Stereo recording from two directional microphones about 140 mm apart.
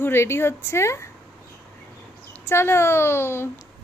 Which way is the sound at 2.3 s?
15° left (ahead or behind).